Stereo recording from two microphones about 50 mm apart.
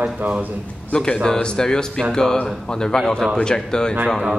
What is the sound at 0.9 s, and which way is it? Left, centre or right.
A man's voice, centre.